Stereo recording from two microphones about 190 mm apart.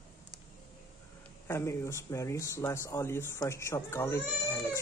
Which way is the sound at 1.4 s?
15° left (ahead or behind).